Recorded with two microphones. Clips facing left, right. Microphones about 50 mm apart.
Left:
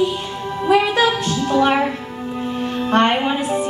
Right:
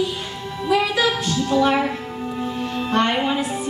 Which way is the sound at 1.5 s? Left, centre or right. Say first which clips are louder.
Left 2 dB; left.